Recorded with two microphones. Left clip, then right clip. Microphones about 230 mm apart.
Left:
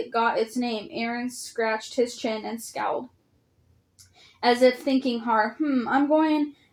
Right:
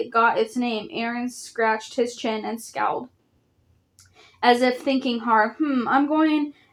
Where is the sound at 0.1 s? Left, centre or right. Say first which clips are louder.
Right 4 dB; right.